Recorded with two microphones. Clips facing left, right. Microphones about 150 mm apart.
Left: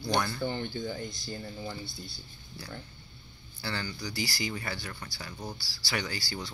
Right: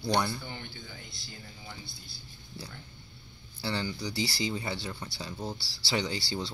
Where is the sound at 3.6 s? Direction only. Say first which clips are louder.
Right 3 dB; 20° right (ahead or behind).